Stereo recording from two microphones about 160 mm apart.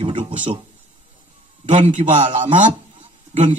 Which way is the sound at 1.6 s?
50° right (ahead or behind).